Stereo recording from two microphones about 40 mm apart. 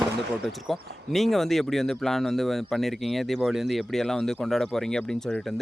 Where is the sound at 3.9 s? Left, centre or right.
Centre.